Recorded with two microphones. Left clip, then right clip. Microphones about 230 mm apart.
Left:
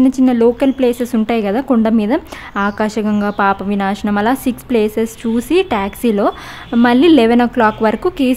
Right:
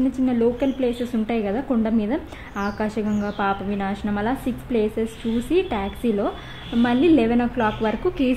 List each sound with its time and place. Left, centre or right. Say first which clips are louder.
0.2 s a woman's voice: left 7 dB; left